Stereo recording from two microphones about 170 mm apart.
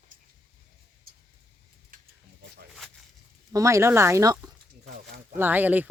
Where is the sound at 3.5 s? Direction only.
15° right (ahead or behind).